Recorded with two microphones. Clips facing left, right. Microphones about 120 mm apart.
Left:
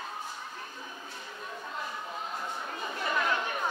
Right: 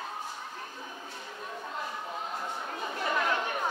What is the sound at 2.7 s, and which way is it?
Chatter, 45° right (ahead or behind).